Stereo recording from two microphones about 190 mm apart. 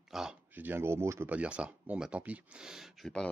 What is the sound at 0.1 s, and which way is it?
Speech, 5° right (ahead or behind).